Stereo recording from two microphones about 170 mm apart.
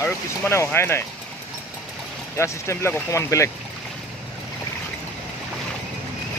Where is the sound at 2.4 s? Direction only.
15° left (ahead or behind).